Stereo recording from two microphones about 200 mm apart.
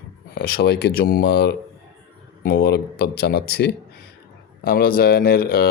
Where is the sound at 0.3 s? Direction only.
50° left (ahead or behind).